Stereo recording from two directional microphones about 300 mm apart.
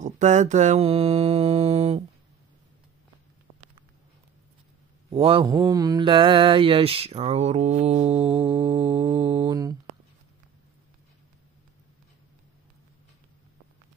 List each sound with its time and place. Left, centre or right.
0.0 s mantra: right
5.1 s mantra: centre